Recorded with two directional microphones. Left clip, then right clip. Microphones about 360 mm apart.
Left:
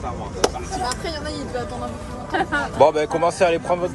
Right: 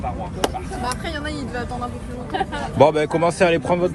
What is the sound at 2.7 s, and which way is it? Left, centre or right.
Speech, centre.